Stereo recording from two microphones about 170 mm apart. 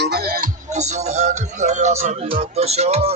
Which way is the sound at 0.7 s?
40° right (ahead or behind).